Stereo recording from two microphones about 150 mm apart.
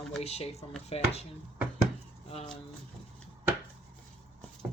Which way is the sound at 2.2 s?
45° left (ahead or behind).